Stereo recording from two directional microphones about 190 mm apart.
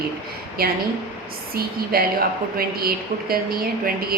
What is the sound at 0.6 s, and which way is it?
Speech, 55° right (ahead or behind).